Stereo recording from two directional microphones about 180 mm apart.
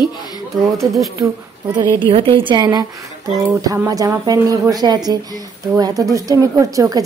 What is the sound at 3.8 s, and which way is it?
Speech, 20° right (ahead or behind).